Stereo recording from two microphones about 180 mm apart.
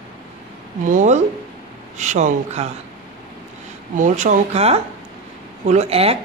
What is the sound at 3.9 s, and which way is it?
Speech, 45° right (ahead or behind).